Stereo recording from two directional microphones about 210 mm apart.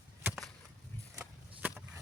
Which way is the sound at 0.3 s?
Centre (ahead or behind).